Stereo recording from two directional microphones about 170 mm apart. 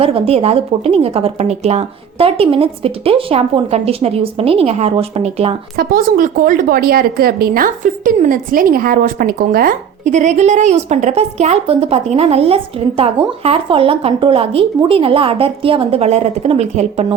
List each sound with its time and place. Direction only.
0.0 s speech: 35° right (ahead or behind)
5.7 s a woman's voice: 55° right (ahead or behind); by 17.2 s 40° right (ahead or behind)